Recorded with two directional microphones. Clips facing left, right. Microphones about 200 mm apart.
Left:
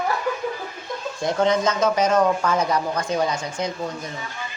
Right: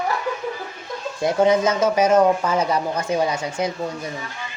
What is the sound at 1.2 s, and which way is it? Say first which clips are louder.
Speech: right 3 dB; 10° right (ahead or behind).